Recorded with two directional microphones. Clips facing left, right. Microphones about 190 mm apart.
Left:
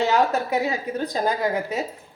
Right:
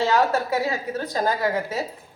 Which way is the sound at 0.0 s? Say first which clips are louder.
Even; 15° left (ahead or behind).